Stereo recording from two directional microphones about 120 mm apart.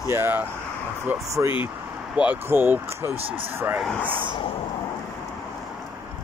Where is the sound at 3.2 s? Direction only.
50° right (ahead or behind).